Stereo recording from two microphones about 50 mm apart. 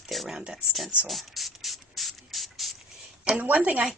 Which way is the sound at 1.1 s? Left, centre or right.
Centre.